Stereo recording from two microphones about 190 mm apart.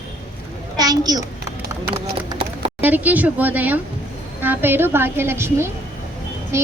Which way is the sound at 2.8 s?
10° right (ahead or behind).